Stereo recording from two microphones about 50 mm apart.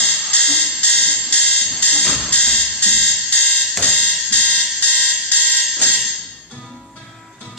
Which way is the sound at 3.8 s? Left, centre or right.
Left.